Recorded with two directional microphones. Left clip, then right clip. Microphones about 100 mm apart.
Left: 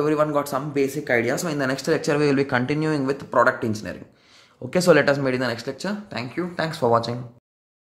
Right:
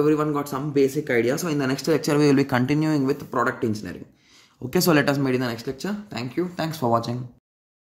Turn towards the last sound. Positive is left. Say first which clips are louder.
# left 3 dB
turn(degrees=-30)  # may be behind; listen again after turning